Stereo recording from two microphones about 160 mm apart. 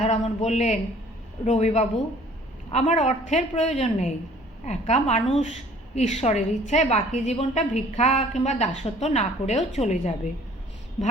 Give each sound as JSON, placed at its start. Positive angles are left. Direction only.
{"t": 0.0, "sound": "a woman's voice", "side_deg": 45}